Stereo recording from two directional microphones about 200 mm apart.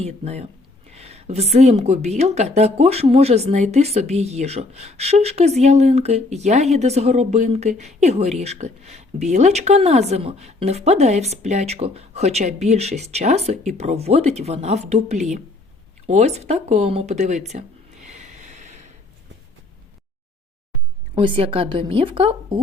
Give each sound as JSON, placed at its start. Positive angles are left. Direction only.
{"t": 0.0, "sound": "a woman's voice", "side_deg": -30}
{"t": 18.0, "sound": "a sound", "side_deg": -35}
{"t": 21.2, "sound": "a woman's voice", "side_deg": -25}